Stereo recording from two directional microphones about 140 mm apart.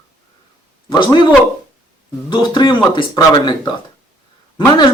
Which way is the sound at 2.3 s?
30° left (ahead or behind).